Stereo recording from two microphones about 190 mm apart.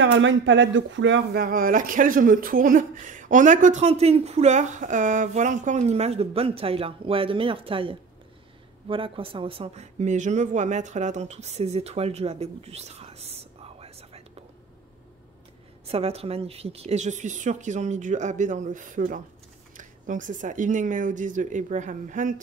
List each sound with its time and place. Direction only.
0.0 s speech: 80° right; by 14.4 s 30° right (ahead or behind)
15.9 s speech: 30° right (ahead or behind)